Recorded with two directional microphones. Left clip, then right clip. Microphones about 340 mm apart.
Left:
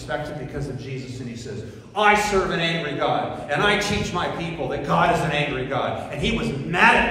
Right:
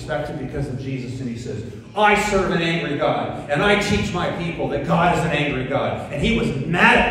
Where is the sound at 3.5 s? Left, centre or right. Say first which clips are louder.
Right 3 dB; centre.